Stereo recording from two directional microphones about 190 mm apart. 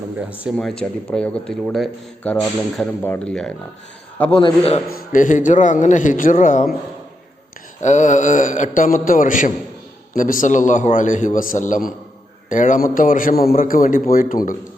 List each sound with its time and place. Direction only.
0.3 s speech: 5° right (ahead or behind)
0.5 s speech: 5° left (ahead or behind)
4.3 s a man's voice: 30° left (ahead or behind)
4.9 s a man's voice: 50° left (ahead or behind)
7.8 s a man's voice: 40° left (ahead or behind)